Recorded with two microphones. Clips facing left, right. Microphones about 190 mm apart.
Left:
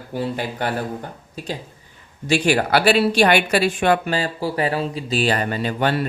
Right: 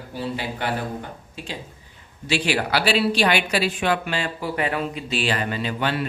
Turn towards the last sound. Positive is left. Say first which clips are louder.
# left 4 dB
turn(degrees=45)  # may be behind; listen again after turning